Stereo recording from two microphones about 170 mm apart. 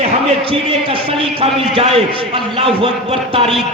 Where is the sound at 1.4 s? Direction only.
35° right (ahead or behind).